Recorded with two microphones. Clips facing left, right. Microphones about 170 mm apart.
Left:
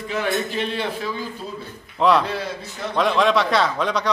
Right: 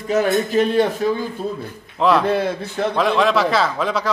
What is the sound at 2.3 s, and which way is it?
Speech, 55° right (ahead or behind).